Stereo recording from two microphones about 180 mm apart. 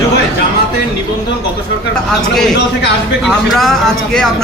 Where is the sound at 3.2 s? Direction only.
Centre (ahead or behind).